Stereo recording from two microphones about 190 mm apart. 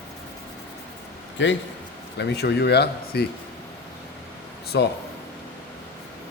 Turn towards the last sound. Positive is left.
turn(degrees=65)  # may be behind; listen again after turning